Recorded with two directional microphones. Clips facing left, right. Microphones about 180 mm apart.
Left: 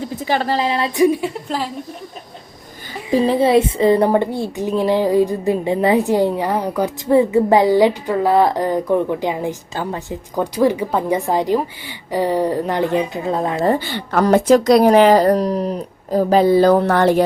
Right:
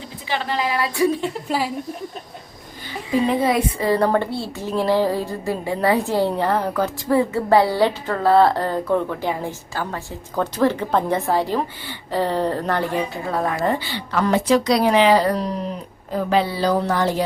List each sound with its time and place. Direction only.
0.0 s a woman's voice: 45° left (ahead or behind); by 1.3 s 15° left (ahead or behind)
1.3 s speech: 10° right (ahead or behind)
3.1 s a woman's voice: 35° left (ahead or behind)
13.7 s a woman's voice: 50° left (ahead or behind)